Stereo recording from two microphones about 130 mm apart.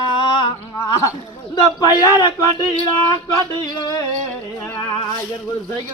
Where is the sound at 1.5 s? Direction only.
35° left (ahead or behind).